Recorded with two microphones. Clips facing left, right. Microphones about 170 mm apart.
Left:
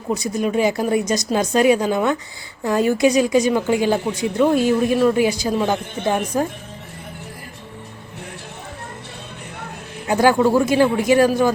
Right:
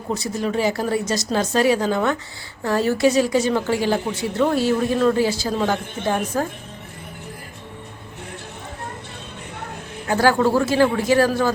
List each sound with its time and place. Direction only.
0.2 s a woman's voice: 15° left (ahead or behind)
10.1 s a woman's voice: 15° left (ahead or behind)